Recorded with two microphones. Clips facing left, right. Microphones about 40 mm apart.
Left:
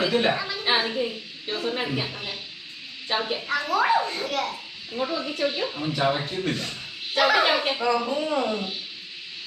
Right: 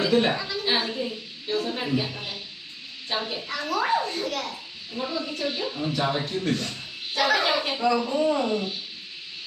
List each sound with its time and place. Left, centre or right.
0.0 s a woman's voice: centre
0.8 s a sound: centre
3.1 s speech: centre